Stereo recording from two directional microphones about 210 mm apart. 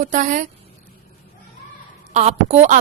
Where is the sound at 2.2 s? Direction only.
30° right (ahead or behind).